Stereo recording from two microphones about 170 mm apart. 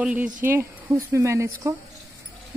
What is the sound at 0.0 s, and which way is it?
Speech, 10° right (ahead or behind).